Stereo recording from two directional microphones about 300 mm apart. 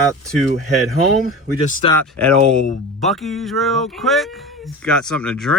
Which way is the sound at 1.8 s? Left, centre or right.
Centre.